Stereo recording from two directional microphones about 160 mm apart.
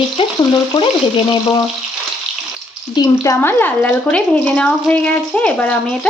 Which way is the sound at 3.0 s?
20° left (ahead or behind).